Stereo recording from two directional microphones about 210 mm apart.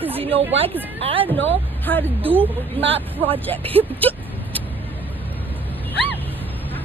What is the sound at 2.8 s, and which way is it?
Speech, 25° right (ahead or behind).